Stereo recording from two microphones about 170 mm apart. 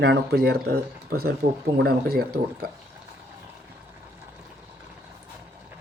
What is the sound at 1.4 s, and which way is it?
Speech, 55° right (ahead or behind).